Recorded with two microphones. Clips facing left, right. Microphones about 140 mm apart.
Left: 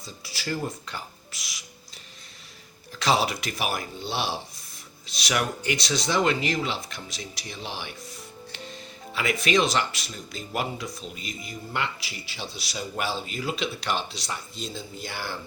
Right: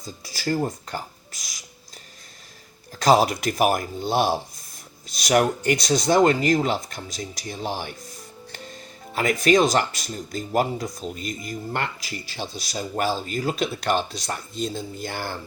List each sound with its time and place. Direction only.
0.0 s speech: 40° right (ahead or behind)
2.9 s speech: 45° right (ahead or behind)
9.1 s speech: 45° right (ahead or behind)